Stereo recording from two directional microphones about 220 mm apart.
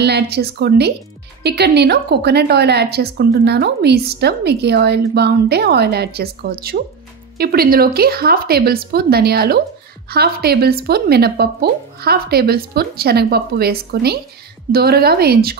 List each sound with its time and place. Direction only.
0.0 s a woman's voice: 50° right (ahead or behind)